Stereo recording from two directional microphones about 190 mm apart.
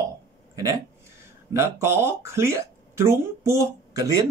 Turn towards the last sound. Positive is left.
turn(degrees=-15)  # may be behind; listen again after turning